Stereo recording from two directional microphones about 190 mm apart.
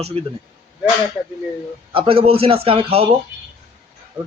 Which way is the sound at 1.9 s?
30° right (ahead or behind).